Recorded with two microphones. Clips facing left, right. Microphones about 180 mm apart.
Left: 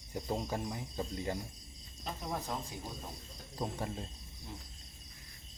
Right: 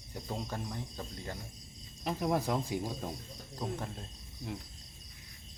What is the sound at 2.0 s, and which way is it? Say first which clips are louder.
Speech: right 8 dB; 75° right (ahead or behind).